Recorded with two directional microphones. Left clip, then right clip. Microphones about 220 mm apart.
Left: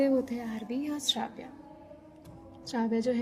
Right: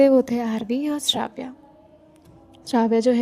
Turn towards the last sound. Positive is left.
turn(degrees=-45)  # may be behind; listen again after turning